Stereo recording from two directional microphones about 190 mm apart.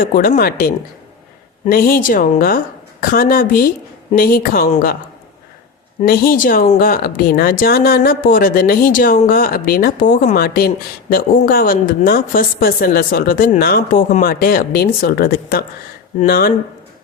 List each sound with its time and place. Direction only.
0.0 s speech: 50° left (ahead or behind)
6.0 s speech: 50° left (ahead or behind)